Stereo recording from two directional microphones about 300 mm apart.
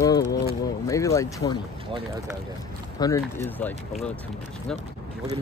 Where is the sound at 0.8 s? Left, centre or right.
Centre.